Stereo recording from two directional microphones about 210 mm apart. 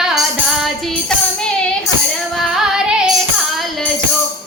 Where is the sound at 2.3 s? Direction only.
Centre (ahead or behind).